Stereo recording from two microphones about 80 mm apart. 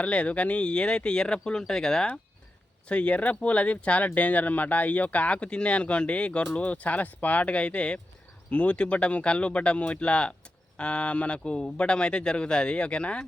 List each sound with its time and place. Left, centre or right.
0.0 s speech: centre